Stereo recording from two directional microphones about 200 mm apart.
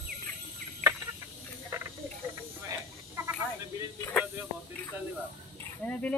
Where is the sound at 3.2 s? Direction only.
15° right (ahead or behind).